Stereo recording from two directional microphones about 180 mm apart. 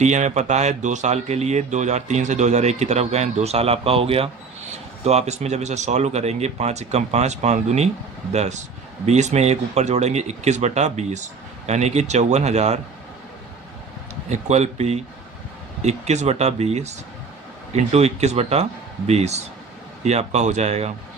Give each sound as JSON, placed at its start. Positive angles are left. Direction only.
{"t": 0.0, "sound": "speech", "side_deg": -40}
{"t": 14.3, "sound": "speech", "side_deg": -40}